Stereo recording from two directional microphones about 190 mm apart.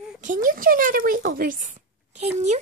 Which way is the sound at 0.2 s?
45° right (ahead or behind).